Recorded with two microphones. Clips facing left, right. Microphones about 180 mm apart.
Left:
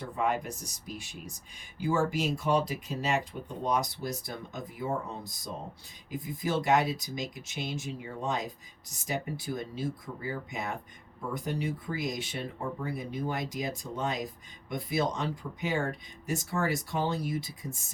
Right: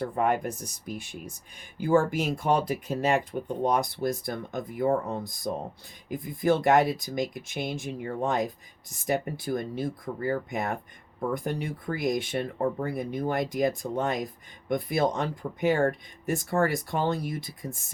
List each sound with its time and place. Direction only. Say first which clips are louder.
0.0 s speech: right 5 dB; 55° right (ahead or behind)